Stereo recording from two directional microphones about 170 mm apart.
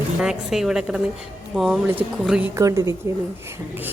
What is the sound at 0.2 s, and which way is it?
A woman's voice, 5° right (ahead or behind).